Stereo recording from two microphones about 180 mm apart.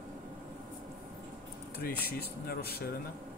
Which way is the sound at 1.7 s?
60° left (ahead or behind).